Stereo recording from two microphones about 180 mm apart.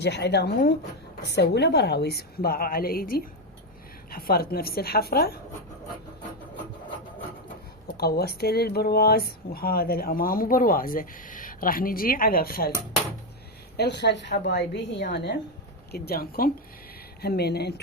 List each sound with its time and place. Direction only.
0.0 s a woman's voice: 65° left (ahead or behind)
7.9 s speech: 60° left (ahead or behind)
13.7 s a woman's voice: 70° left (ahead or behind)